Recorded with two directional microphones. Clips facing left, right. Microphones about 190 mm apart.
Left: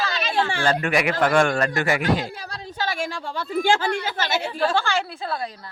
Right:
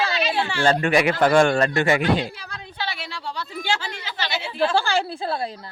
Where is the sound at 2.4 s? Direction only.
40° left (ahead or behind).